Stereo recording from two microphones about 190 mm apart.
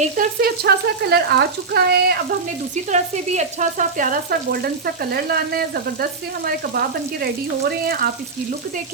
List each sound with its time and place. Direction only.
0.0 s frying: 50° right (ahead or behind)
1.1 s speech: 55° right (ahead or behind)
2.9 s frying: 35° right (ahead or behind)
7.9 s frying: 50° right (ahead or behind)